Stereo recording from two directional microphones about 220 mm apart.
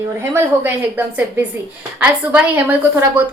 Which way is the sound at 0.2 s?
10° right (ahead or behind).